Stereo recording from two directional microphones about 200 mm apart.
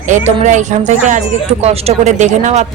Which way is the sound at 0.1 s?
35° right (ahead or behind).